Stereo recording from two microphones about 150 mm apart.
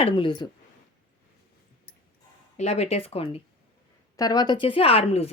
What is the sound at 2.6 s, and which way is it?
Speech, 45° left (ahead or behind).